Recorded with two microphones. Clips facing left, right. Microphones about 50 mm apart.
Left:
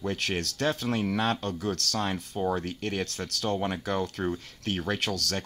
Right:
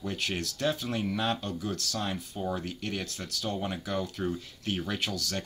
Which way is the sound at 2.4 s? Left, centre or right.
Left.